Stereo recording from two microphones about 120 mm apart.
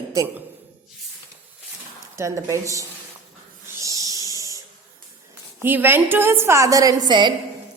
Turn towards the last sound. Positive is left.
turn(degrees=-35)  # may be behind; listen again after turning